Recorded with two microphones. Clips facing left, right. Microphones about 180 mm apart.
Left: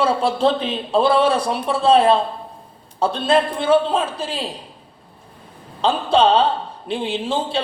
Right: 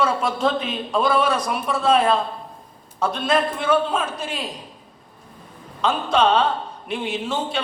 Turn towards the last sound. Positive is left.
turn(degrees=30)  # may be behind; listen again after turning